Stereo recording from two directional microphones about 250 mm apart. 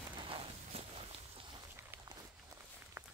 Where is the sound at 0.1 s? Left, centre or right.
Centre.